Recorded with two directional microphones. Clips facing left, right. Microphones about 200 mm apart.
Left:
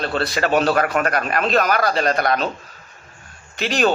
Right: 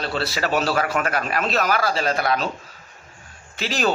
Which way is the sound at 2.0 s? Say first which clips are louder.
Left 3 dB; 5° right (ahead or behind).